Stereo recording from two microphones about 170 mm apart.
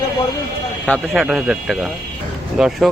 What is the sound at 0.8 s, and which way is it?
Speech, centre (ahead or behind).